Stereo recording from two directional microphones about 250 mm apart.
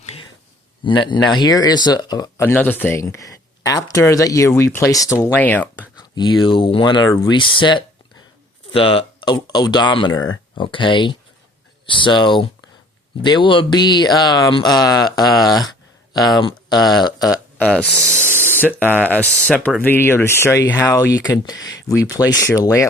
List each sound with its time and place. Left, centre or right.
0.0 s a sound: left
0.9 s speech: centre
6.1 s speech: centre
17.7 s speech: centre